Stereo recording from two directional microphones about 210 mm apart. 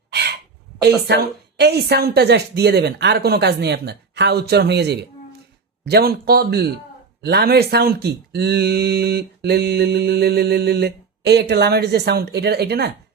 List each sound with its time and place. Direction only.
0.1 s throat clearing: 50° right (ahead or behind)
0.8 s speech: 55° right (ahead or behind)